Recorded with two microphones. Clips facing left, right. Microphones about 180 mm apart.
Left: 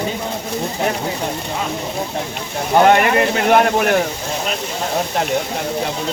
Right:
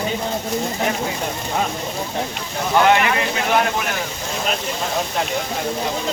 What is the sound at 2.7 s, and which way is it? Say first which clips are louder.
Speech: left 4 dB; 40° left (ahead or behind).